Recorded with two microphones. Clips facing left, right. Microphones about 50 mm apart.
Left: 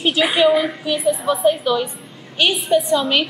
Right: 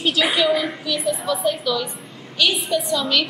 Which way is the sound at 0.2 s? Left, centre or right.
Centre.